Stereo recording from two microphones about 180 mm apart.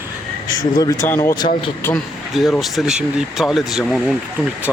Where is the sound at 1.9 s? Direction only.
Centre (ahead or behind).